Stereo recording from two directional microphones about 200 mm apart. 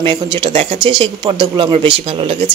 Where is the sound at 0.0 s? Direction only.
20° right (ahead or behind).